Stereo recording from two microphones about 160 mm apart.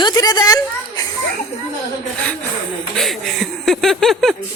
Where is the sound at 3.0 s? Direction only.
Centre (ahead or behind).